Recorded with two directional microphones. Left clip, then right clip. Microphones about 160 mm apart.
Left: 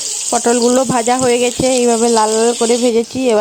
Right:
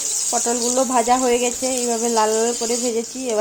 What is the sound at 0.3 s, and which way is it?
Speech, 90° left.